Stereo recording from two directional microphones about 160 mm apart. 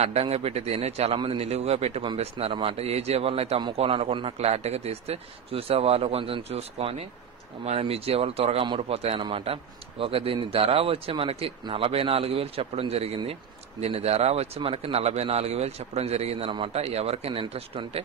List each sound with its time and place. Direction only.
0.0 s a man's voice: 40° right (ahead or behind)